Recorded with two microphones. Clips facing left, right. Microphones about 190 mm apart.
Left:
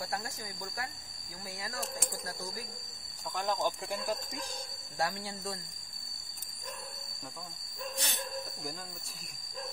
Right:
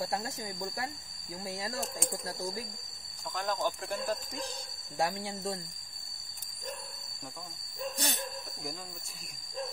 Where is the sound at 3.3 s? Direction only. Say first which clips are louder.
Even; 15° left (ahead or behind).